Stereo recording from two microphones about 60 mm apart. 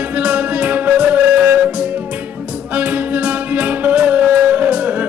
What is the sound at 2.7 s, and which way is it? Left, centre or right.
Music, right.